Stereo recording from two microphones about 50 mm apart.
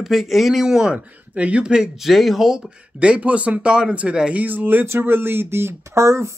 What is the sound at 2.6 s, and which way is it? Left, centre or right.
Speech, right.